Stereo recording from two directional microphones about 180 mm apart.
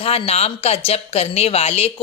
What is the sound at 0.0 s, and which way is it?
Speech, 35° left (ahead or behind).